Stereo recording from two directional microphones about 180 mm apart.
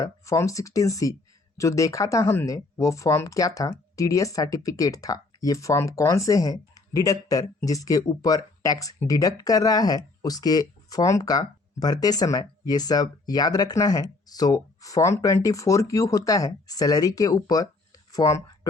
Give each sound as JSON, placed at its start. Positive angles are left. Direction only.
{"t": 0.0, "sound": "speech", "side_deg": 15}